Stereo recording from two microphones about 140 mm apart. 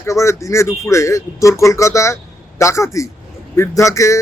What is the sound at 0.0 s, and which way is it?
Speech, 20° left (ahead or behind).